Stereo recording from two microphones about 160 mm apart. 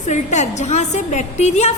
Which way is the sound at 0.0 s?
50° left (ahead or behind).